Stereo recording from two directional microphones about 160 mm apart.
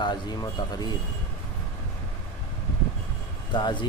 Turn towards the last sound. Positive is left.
turn(degrees=30)  # may be behind; listen again after turning